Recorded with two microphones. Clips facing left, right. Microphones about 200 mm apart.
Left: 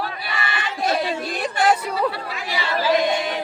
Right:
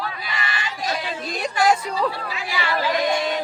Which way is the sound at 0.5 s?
55° left (ahead or behind).